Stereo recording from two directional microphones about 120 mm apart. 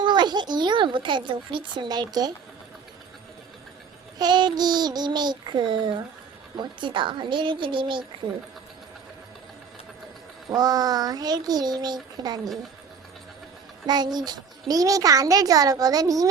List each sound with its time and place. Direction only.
0.0 s a child's voice: 40° right (ahead or behind)
4.2 s a child's voice: 40° right (ahead or behind)
10.5 s a child's voice: 30° right (ahead or behind)
13.8 s a child's voice: 35° right (ahead or behind)